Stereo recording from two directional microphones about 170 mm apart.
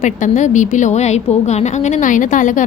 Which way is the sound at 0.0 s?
45° left (ahead or behind).